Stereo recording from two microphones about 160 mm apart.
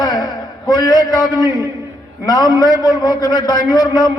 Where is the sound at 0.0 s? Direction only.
25° left (ahead or behind).